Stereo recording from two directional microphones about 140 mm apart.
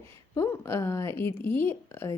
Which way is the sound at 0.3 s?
20° left (ahead or behind).